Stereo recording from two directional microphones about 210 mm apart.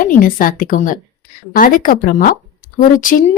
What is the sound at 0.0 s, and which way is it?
A woman's voice, 40° left (ahead or behind).